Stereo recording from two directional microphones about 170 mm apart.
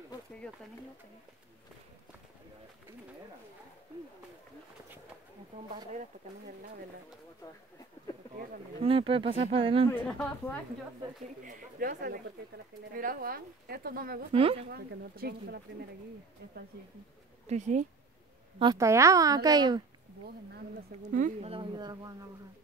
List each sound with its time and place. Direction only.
0.4 s a woman's voice: 5° left (ahead or behind)
8.8 s speech: 35° right (ahead or behind)
9.8 s a woman's voice: 5° left (ahead or behind)
11.4 s speech: 55° right (ahead or behind)
14.3 s speech: 35° right (ahead or behind)
14.7 s speech: 65° right (ahead or behind)
17.5 s speech: 45° right (ahead or behind)
18.6 s a woman's voice: 20° right (ahead or behind)
21.1 s speech: 50° right (ahead or behind)
21.5 s a woman's voice: 30° right (ahead or behind)